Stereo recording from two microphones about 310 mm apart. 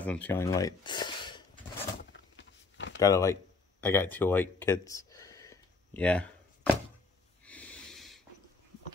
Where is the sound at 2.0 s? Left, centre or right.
Left.